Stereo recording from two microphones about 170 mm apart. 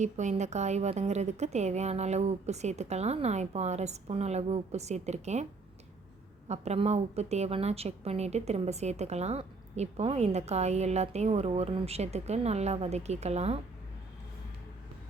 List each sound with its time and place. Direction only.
0.0 s a woman's voice: 45° right (ahead or behind)
6.5 s a woman's voice: 40° right (ahead or behind)